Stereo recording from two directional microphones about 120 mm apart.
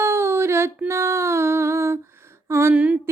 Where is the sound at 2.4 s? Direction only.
20° right (ahead or behind).